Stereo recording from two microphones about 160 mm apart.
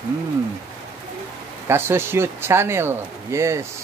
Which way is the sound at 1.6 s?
15° right (ahead or behind).